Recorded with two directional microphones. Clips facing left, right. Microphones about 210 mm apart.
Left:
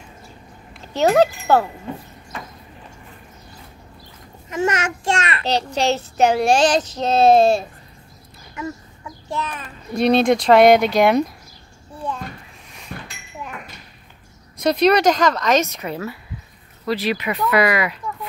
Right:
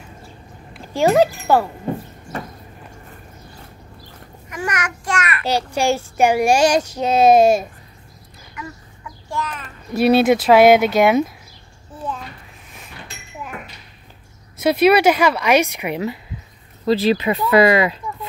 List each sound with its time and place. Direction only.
0.9 s speech: 10° right (ahead or behind)
4.5 s child singing: 25° left (ahead or behind)
5.4 s speech: 10° right (ahead or behind)
8.5 s child singing: 25° left (ahead or behind)
9.9 s speech: 5° right (ahead or behind)
12.0 s a sound: 5° right (ahead or behind)
12.9 s a sound: 55° left (ahead or behind)
14.6 s speech: 5° right (ahead or behind); by 17.9 s 25° right (ahead or behind)